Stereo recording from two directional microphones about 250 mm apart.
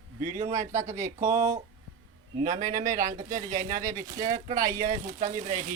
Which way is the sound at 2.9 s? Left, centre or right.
Right.